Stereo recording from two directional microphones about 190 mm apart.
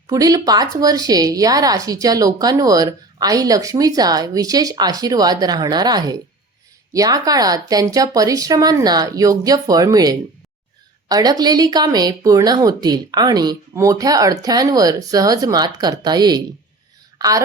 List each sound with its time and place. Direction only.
0.1 s a woman's voice: 20° right (ahead or behind)